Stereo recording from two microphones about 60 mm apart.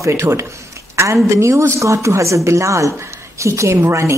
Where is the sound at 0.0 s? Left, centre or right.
Right.